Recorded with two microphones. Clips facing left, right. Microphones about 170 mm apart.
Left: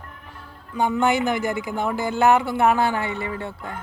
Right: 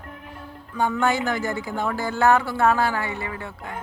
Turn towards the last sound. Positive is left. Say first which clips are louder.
# left 3 dB
turn(degrees=30)  # may be behind; listen again after turning